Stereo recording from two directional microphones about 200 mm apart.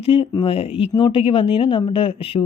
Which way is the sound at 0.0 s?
30° left (ahead or behind).